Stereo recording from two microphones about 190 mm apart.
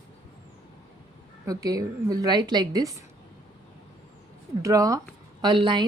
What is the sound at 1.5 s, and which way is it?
A woman's voice, 20° right (ahead or behind).